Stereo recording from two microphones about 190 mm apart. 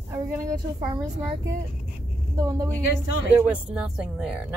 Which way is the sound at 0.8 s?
20° right (ahead or behind).